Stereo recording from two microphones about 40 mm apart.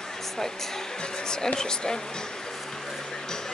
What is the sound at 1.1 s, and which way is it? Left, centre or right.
Speech, centre.